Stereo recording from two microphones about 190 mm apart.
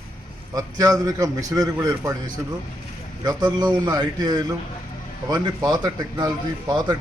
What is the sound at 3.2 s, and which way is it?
Speech, 20° right (ahead or behind).